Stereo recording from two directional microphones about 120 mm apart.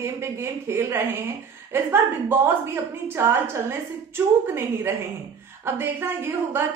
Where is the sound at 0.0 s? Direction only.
20° right (ahead or behind).